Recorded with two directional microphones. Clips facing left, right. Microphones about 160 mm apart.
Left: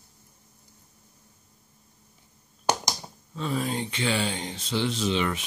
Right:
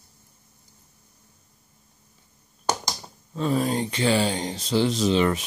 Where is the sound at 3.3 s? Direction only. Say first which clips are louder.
Right 5 dB; 40° right (ahead or behind).